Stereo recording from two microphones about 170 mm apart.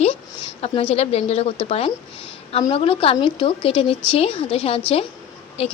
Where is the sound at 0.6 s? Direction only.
35° left (ahead or behind).